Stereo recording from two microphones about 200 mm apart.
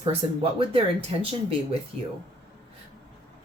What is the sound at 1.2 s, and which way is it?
Speech, 30° right (ahead or behind).